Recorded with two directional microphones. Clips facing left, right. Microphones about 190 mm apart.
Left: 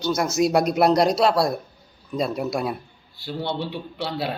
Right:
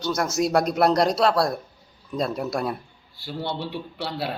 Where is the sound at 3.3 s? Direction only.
10° right (ahead or behind).